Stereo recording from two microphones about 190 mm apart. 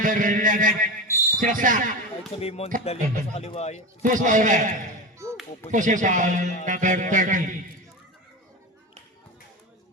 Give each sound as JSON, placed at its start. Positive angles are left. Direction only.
{"t": 0.0, "sound": "a man's voice", "side_deg": -45}
{"t": 2.4, "sound": "speech", "side_deg": 30}
{"t": 4.0, "sound": "a man's voice", "side_deg": -40}